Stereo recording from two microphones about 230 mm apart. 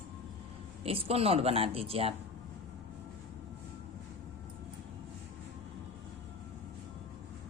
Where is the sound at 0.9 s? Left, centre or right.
Right.